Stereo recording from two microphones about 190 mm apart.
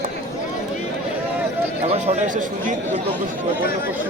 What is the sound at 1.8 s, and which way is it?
A man's voice, 35° right (ahead or behind).